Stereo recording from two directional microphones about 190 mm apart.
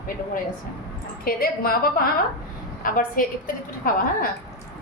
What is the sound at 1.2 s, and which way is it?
A woman's voice, 50° left (ahead or behind).